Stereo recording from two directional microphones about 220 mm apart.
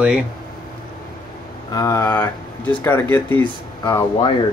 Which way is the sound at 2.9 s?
10° left (ahead or behind).